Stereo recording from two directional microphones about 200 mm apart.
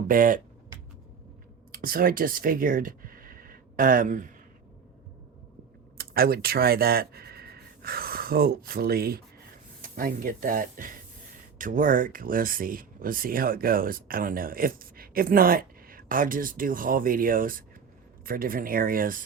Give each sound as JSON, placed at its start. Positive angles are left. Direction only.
{"t": 0.1, "sound": "speech", "side_deg": -45}
{"t": 1.7, "sound": "speech", "side_deg": -45}
{"t": 6.0, "sound": "speech", "side_deg": -50}